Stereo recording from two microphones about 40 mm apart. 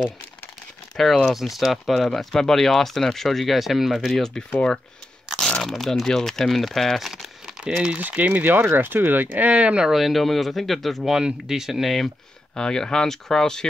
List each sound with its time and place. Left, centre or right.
0.9 s speech: centre
2.0 s speech: centre
4.2 s speech: centre
5.6 s speech: centre
7.6 s speech: right
8.2 s speech: right
9.8 s speech: centre
11.1 s speech: centre
12.5 s speech: centre